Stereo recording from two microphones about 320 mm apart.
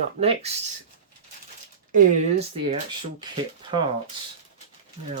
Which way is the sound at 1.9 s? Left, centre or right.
Right.